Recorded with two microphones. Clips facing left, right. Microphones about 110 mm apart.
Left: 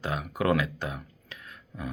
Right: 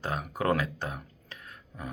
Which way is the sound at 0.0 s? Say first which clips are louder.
Left 2 dB; 35° right (ahead or behind).